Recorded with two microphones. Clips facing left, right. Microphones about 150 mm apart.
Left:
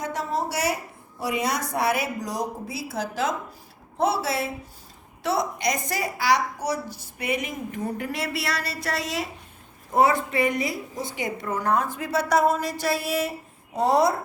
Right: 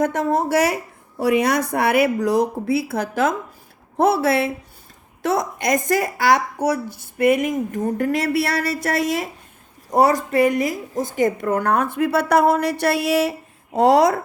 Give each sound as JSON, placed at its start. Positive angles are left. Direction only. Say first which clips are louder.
{"t": 0.0, "sound": "a woman's voice", "louder": "right 8 dB", "side_deg": -55}
{"t": 9.9, "sound": "a woman's voice", "louder": "right 4 dB", "side_deg": -40}